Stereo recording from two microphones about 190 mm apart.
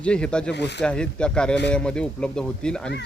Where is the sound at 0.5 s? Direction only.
65° left (ahead or behind).